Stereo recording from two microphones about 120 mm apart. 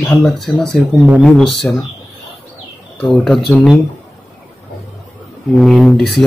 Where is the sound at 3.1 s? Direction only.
5° left (ahead or behind).